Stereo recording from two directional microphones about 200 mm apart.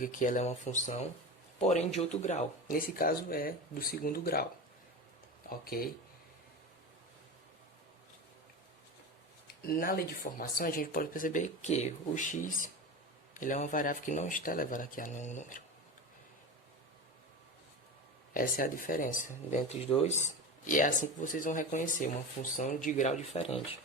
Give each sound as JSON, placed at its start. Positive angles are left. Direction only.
{"t": 0.0, "sound": "a man's voice", "side_deg": 40}
{"t": 5.5, "sound": "speech", "side_deg": 50}
{"t": 9.6, "sound": "speech", "side_deg": 45}
{"t": 18.3, "sound": "speech", "side_deg": 45}